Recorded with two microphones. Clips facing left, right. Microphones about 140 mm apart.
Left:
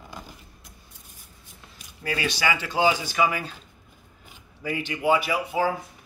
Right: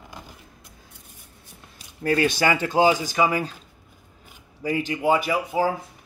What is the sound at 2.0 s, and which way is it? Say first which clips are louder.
Speech: right 6 dB; 45° right (ahead or behind).